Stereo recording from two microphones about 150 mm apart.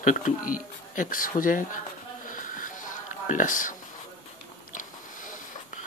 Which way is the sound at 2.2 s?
65° left (ahead or behind).